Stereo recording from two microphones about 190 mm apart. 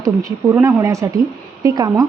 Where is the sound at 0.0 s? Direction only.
15° right (ahead or behind).